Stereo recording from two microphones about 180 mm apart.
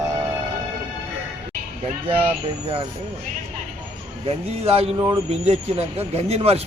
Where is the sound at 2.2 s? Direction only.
30° right (ahead or behind).